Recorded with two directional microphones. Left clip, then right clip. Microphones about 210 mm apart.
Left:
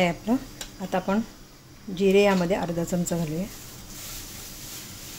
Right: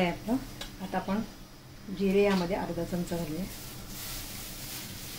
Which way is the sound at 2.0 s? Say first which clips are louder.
Left 6 dB; 50° left (ahead or behind).